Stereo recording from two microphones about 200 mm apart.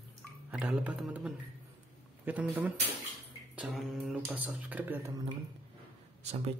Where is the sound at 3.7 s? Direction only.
5° right (ahead or behind).